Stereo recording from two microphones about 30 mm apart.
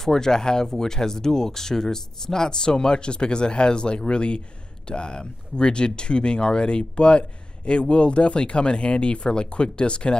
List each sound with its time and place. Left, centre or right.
0.0 s speech: centre; by 10.1 s left